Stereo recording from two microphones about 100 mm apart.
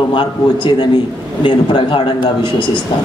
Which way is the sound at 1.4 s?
60° left (ahead or behind).